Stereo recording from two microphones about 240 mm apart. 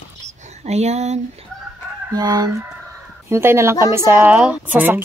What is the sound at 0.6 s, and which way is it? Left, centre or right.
Speech, right.